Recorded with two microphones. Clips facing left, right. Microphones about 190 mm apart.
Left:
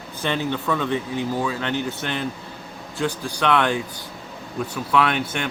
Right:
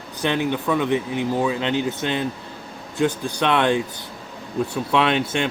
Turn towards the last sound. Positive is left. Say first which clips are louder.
# right 2 dB
turn(degrees=-20)  # may be behind; listen again after turning